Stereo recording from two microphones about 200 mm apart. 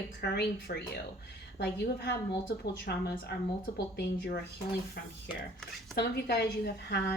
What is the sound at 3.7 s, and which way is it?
Speech, 55° left (ahead or behind).